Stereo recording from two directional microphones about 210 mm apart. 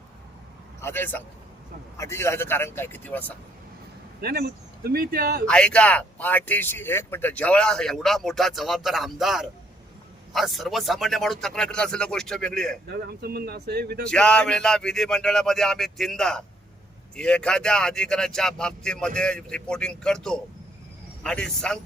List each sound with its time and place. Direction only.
0.8 s speech: 10° left (ahead or behind)
4.2 s speech: 50° right (ahead or behind)
5.5 s speech: 5° left (ahead or behind)
12.9 s speech: 50° right (ahead or behind)
14.1 s speech: 5° left (ahead or behind)